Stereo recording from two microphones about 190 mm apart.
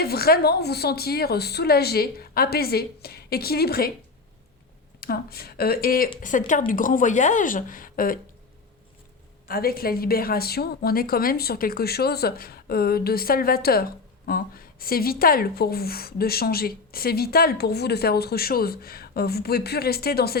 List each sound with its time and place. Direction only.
0.0 s a woman's voice: 55° left (ahead or behind)
4.9 s a woman's voice: 55° left (ahead or behind)
9.5 s a woman's voice: 55° left (ahead or behind)